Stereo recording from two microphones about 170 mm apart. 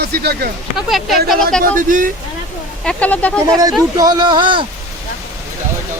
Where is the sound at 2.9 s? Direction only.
10° left (ahead or behind).